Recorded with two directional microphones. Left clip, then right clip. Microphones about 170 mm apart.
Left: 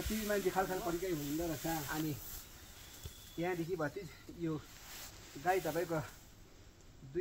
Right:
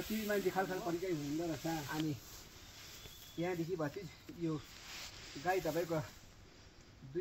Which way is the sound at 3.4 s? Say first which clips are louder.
Left 1 dB; 30° left (ahead or behind).